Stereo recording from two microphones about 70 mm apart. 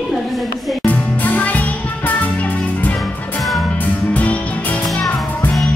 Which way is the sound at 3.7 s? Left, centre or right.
Left.